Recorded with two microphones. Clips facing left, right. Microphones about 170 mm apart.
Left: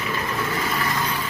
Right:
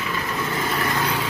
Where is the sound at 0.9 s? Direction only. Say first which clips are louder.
Right 2 dB; 90° right.